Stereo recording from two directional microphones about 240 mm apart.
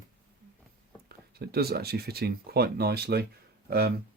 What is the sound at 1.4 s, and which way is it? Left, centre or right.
Speech, right.